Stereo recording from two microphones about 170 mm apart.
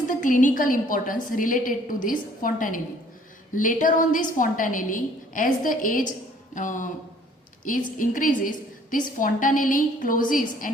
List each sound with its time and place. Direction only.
0.1 s a woman's voice: 50° left (ahead or behind)